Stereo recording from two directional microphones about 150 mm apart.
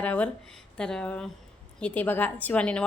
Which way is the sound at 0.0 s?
10° left (ahead or behind).